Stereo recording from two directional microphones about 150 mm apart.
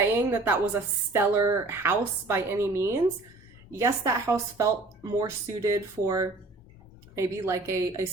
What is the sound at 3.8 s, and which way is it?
A woman's voice, 20° right (ahead or behind).